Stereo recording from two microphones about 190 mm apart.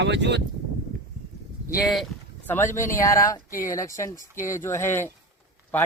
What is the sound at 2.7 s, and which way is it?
Speech, 15° left (ahead or behind).